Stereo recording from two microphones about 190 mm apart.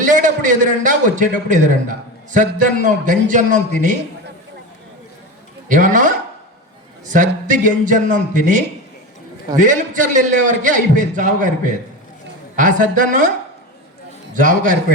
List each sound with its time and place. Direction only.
0.0 s a man's voice: 40° right (ahead or behind)
5.6 s a man's voice: 45° right (ahead or behind)
14.3 s a man's voice: 45° right (ahead or behind)